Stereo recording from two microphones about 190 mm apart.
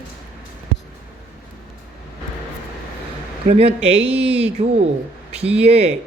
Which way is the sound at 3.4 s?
35° right (ahead or behind).